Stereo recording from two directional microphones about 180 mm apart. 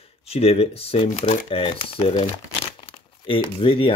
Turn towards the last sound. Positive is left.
turn(degrees=30)  # may be behind; listen again after turning